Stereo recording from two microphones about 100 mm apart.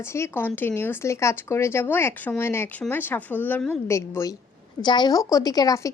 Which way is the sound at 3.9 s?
30° left (ahead or behind).